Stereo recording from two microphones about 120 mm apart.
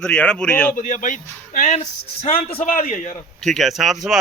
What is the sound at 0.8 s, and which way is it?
Speech, 90° left.